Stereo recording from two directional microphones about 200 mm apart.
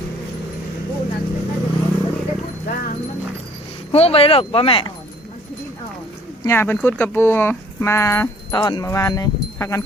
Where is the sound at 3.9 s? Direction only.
30° left (ahead or behind).